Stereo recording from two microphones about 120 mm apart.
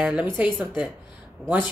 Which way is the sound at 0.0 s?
15° right (ahead or behind).